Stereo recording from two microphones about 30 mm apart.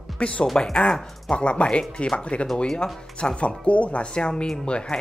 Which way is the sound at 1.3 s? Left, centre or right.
Left.